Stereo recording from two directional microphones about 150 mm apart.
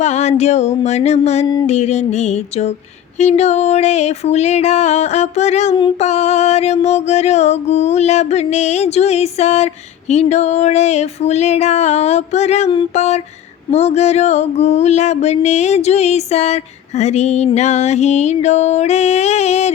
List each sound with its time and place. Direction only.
0.0 s music: 50° left (ahead or behind)
0.9 s mantra: 50° left (ahead or behind)